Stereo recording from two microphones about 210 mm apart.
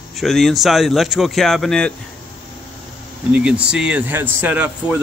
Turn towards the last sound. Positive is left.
turn(degrees=-5)  # may be behind; listen again after turning